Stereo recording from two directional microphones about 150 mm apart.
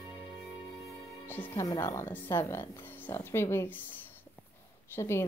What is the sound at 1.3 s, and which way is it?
A woman's voice, 15° left (ahead or behind).